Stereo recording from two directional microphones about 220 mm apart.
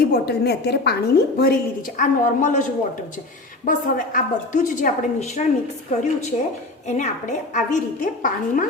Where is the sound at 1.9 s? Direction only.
35° left (ahead or behind).